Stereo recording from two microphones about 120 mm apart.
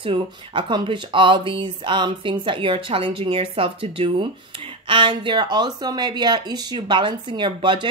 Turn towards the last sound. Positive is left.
turn(degrees=-40)  # may be behind; listen again after turning